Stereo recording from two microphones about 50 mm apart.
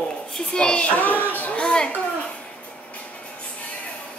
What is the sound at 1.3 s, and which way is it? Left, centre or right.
Speech, left.